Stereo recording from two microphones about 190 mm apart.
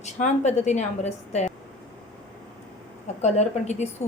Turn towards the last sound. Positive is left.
turn(degrees=35)  # may be behind; listen again after turning